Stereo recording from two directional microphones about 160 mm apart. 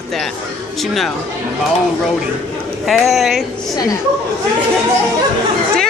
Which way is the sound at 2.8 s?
Centre (ahead or behind).